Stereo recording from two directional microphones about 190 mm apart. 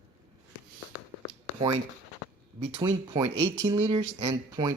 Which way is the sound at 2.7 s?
20° right (ahead or behind).